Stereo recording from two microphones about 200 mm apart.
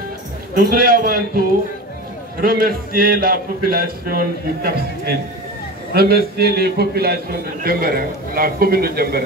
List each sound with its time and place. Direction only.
0.6 s a man's voice: 45° right (ahead or behind)
2.4 s a man's voice: 45° right (ahead or behind)